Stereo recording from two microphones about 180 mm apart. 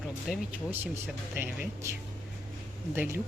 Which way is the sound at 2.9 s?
10° right (ahead or behind).